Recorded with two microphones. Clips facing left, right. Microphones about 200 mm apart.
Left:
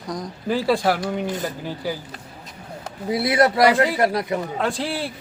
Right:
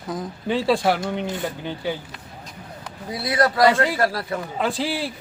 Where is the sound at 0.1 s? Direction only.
Centre (ahead or behind).